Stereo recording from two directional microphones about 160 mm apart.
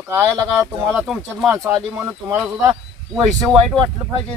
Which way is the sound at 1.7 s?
15° right (ahead or behind).